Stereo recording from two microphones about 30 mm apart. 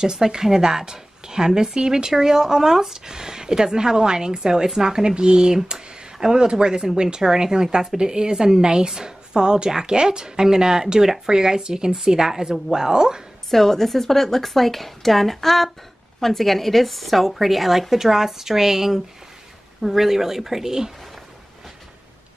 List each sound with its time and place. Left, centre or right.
0.0 s a woman's voice: right
6.1 s a woman's voice: centre
13.5 s a woman's voice: centre